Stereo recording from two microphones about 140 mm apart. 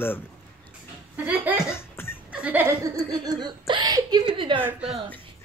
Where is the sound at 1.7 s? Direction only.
15° left (ahead or behind).